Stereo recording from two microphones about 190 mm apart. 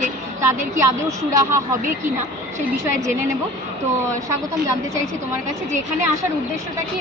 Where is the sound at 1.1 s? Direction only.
15° right (ahead or behind).